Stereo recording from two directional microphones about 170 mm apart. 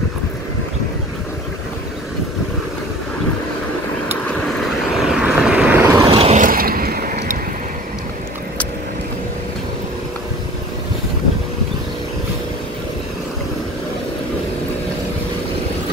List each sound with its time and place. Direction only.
4.3 s vehicle: centre (ahead or behind)
5.8 s vehicle: 15° right (ahead or behind)
6.0 s vehicle: 35° right (ahead or behind)
6.4 s a sound: 55° right (ahead or behind)